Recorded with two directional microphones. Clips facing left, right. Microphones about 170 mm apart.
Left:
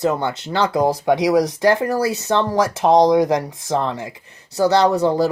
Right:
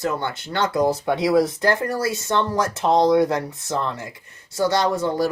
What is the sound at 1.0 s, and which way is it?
Speech, 85° left.